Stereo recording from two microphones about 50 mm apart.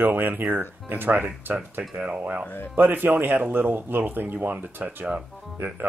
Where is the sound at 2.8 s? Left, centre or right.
Right.